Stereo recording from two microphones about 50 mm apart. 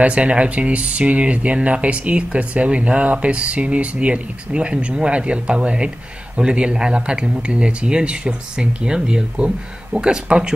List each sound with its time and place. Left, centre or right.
0.0 s speech: right